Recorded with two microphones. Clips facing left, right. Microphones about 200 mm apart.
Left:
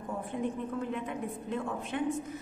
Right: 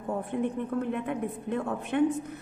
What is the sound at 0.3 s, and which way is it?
A woman's voice, 60° right (ahead or behind).